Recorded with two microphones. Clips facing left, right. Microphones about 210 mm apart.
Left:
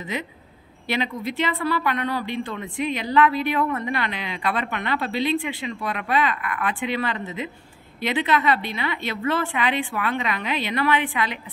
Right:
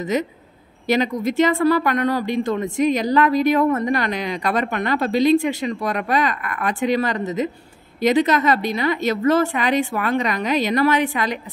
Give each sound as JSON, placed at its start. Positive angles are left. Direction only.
{"t": 0.0, "sound": "speech", "side_deg": -45}